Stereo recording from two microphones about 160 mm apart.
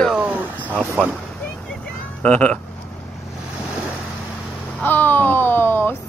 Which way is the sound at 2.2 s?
10° left (ahead or behind).